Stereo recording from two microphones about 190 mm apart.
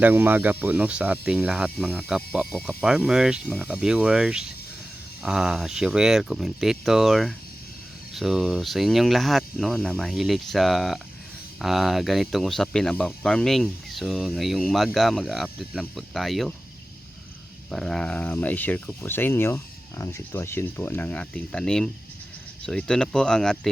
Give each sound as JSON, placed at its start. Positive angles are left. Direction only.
{"t": 0.0, "sound": "speech", "side_deg": -10}
{"t": 17.7, "sound": "speech", "side_deg": 5}